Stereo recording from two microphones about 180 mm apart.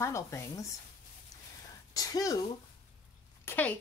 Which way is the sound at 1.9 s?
20° left (ahead or behind).